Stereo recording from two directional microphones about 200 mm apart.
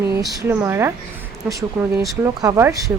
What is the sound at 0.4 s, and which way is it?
Speech, 10° right (ahead or behind).